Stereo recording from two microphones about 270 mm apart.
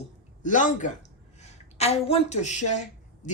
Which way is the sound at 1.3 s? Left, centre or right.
Left.